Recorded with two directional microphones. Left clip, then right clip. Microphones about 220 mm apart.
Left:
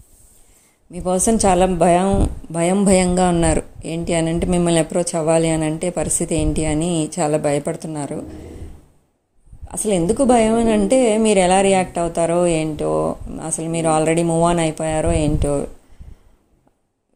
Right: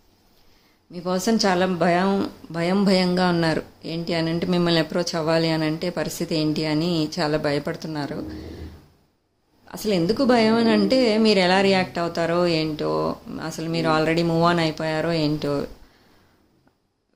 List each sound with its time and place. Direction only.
0.9 s a woman's voice: 20° left (ahead or behind)
9.6 s a woman's voice: 15° left (ahead or behind)